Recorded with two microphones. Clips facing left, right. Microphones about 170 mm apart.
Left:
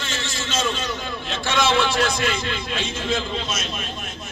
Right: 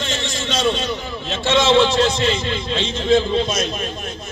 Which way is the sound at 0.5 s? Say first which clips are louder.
Right 5 dB; 35° right (ahead or behind).